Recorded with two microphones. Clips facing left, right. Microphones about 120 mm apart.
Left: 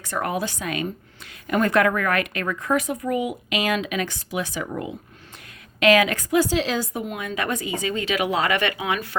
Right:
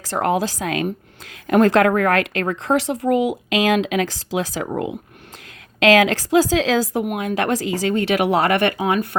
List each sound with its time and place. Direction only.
0.1 s a woman's voice: 90° right
2.6 s speech: 80° right
5.8 s a woman's voice: 90° right; by 8.7 s 55° right (ahead or behind)